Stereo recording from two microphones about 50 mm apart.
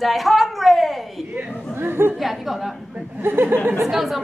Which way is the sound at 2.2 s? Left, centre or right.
Centre.